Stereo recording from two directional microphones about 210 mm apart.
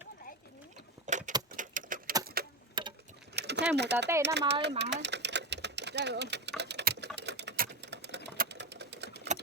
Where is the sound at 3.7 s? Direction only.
55° right (ahead or behind).